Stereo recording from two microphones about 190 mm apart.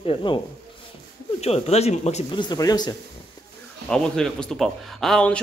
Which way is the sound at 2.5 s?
20° left (ahead or behind).